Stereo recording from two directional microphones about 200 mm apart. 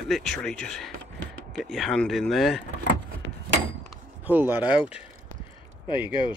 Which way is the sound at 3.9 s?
10° right (ahead or behind).